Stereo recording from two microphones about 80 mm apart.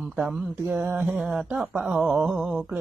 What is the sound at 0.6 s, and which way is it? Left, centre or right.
Mantra, right.